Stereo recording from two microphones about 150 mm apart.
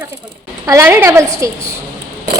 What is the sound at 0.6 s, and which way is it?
Speech, 20° right (ahead or behind).